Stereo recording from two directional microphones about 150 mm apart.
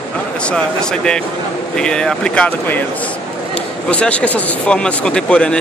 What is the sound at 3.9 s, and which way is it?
Speech, 10° left (ahead or behind).